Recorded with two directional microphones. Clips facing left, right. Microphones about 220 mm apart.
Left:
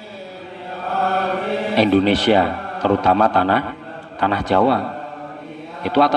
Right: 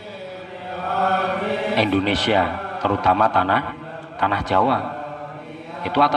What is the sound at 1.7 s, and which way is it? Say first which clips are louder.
A man's voice: left 6 dB; 30° left (ahead or behind).